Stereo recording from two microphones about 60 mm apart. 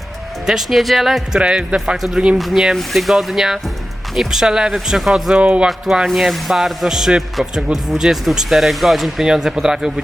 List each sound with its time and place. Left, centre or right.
0.4 s a man's voice: centre
1.3 s speech: centre
2.0 s a man's voice: centre
5.4 s speech: right
5.6 s a man's voice: centre